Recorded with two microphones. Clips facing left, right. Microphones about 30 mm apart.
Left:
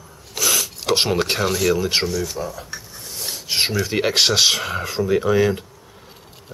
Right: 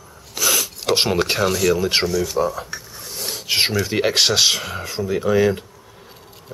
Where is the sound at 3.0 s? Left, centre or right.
Centre.